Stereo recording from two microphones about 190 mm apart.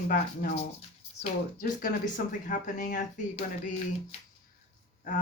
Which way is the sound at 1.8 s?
45° left (ahead or behind).